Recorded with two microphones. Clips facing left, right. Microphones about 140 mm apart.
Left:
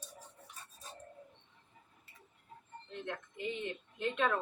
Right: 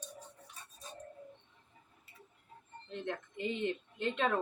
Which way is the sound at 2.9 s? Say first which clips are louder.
Right 3 dB; 30° right (ahead or behind).